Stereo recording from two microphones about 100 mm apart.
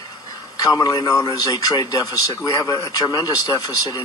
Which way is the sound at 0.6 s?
35° left (ahead or behind).